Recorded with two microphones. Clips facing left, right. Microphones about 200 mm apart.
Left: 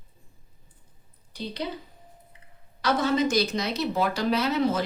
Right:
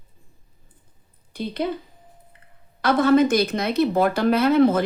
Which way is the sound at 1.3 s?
55° right (ahead or behind).